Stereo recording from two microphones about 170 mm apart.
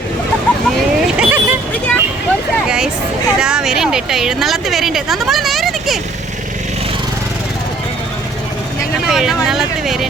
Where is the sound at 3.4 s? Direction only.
5° right (ahead or behind).